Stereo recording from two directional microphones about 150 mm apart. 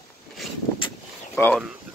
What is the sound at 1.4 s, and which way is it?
Speech, 20° left (ahead or behind).